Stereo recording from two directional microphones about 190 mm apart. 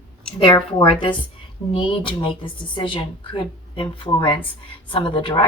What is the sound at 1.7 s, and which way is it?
Speech, 25° left (ahead or behind).